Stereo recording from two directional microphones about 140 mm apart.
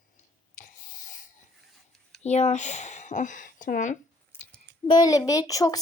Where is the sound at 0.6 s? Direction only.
70° left (ahead or behind).